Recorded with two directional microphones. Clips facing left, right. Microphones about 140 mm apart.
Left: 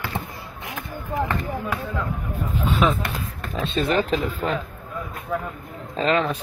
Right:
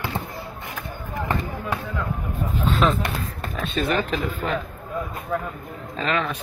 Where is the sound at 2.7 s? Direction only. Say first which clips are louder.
Even; centre (ahead or behind).